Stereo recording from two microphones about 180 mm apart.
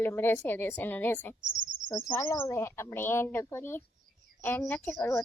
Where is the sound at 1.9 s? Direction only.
20° left (ahead or behind).